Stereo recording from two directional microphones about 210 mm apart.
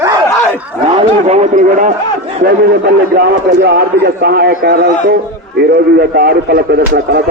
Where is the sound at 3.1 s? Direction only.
50° right (ahead or behind).